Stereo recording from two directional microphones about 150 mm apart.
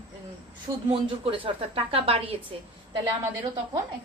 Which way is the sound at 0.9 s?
35° right (ahead or behind).